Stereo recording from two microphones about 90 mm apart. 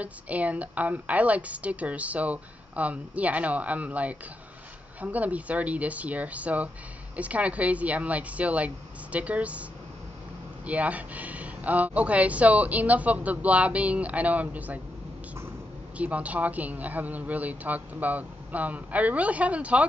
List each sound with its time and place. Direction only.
0.0 s a woman's voice: 15° right (ahead or behind)
16.0 s a woman's voice: 15° right (ahead or behind)